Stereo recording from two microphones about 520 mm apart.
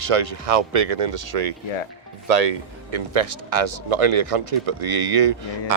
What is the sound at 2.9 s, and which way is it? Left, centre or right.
Speech, right.